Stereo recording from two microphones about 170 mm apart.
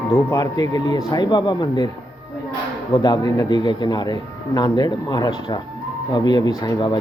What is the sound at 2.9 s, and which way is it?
A man's voice, 25° left (ahead or behind).